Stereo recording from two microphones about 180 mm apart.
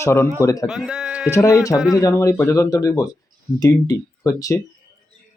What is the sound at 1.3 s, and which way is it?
Speech, 15° left (ahead or behind).